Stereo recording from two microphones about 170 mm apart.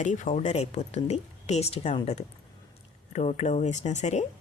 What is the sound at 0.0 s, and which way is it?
A woman's voice, 50° left (ahead or behind).